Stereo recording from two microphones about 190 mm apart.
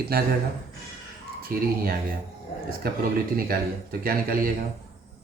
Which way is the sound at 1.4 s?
50° right (ahead or behind).